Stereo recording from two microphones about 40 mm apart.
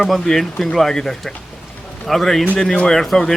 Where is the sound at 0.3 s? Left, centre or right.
Centre.